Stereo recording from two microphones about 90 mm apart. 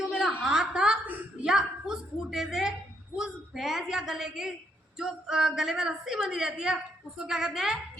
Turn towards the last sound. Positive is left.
turn(degrees=-5)  # may be behind; listen again after turning